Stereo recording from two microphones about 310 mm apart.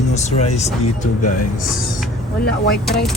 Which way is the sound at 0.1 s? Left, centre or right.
Left.